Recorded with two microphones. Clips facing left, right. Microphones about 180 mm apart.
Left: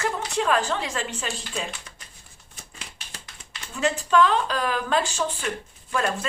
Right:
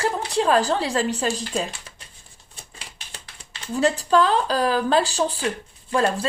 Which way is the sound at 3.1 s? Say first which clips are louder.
Right 1 dB; 30° right (ahead or behind).